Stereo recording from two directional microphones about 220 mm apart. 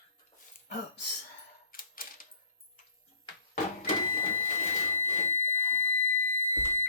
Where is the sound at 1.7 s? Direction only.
40° left (ahead or behind).